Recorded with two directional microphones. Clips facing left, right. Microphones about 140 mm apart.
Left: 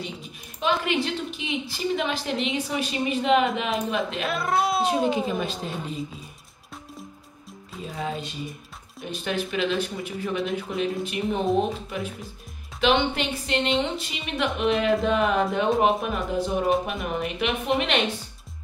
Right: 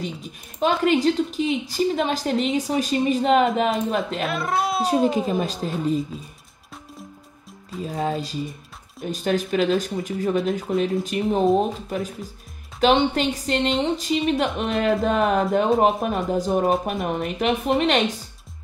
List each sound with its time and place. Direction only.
0.6 s a woman's voice: 40° right (ahead or behind)
4.2 s speech: centre (ahead or behind)
5.1 s a woman's voice: 40° right (ahead or behind)
5.6 s speech: centre (ahead or behind)
7.9 s a woman's voice: 40° right (ahead or behind)
12.8 s a woman's voice: 40° right (ahead or behind)